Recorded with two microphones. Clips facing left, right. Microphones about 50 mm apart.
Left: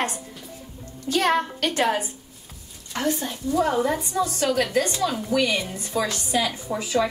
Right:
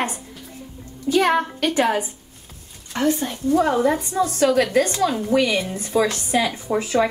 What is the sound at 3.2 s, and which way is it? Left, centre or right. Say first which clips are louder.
Speech: right 4 dB; right.